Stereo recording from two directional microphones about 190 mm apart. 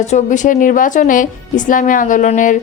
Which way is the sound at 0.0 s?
40° left (ahead or behind).